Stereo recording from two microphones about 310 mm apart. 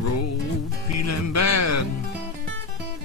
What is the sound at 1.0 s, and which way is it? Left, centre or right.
Music, left.